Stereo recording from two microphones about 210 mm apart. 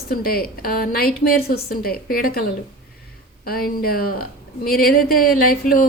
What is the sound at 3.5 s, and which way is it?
A woman's voice, 45° left (ahead or behind).